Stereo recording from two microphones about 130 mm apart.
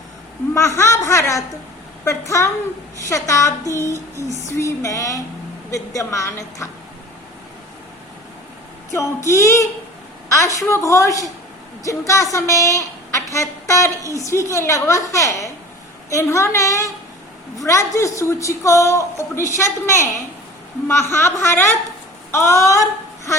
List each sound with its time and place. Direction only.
0.5 s a woman's voice: 20° left (ahead or behind)
8.9 s a woman's voice: 20° left (ahead or behind)